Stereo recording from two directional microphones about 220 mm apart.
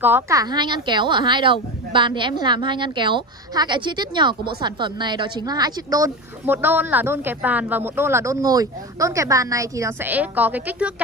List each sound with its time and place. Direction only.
0.0 s a woman's voice: 10° right (ahead or behind)